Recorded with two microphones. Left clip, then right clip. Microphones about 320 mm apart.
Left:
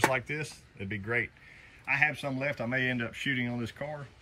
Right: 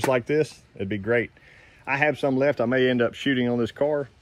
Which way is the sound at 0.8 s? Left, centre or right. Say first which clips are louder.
Right 8 dB; centre.